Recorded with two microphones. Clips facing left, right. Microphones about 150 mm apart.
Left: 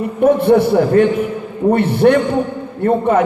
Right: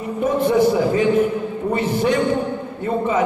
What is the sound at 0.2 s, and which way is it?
A man's voice, 60° left (ahead or behind).